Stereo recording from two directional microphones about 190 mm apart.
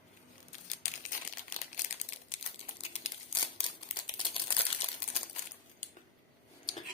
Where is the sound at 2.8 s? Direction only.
35° left (ahead or behind).